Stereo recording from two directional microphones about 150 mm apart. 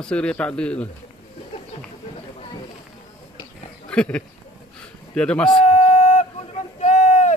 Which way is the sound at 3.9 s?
5° left (ahead or behind).